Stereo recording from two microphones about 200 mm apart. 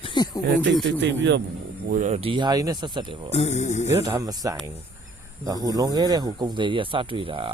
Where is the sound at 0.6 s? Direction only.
60° right (ahead or behind).